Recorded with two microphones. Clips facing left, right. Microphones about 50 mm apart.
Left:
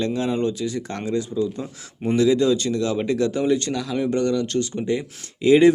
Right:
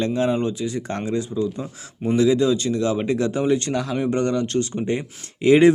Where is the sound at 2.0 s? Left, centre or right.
Centre.